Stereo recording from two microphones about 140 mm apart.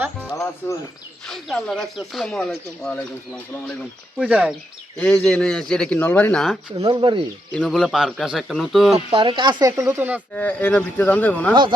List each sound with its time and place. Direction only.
0.6 s speech: 15° left (ahead or behind)
1.3 s speech: centre (ahead or behind)
4.2 s speech: 10° right (ahead or behind)
4.9 s speech: 5° left (ahead or behind)
6.7 s speech: 40° right (ahead or behind)
7.5 s speech: 5° left (ahead or behind)
9.0 s speech: 40° right (ahead or behind); by 10.2 s 15° right (ahead or behind)
10.3 s speech: 10° left (ahead or behind)